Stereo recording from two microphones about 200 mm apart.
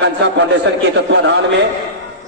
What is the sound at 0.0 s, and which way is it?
A man's voice, 60° right (ahead or behind).